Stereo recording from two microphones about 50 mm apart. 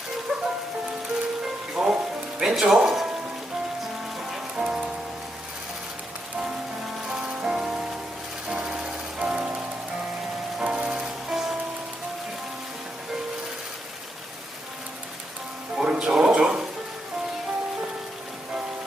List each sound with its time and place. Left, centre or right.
0.3 s music: centre
1.7 s music: centre
2.4 s speech: centre
4.5 s music: centre
7.1 s music: centre
10.6 s music: right
15.7 s music: centre